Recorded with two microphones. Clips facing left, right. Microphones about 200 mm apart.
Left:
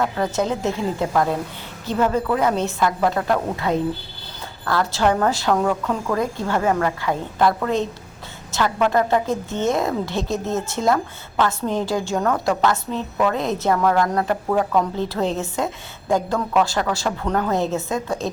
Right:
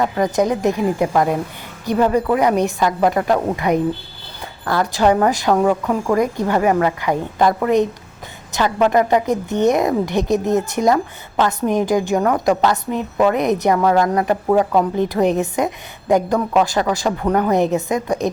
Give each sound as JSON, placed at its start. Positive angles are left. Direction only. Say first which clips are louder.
{"t": 0.0, "sound": "a woman's voice", "louder": "right 4 dB", "side_deg": -15}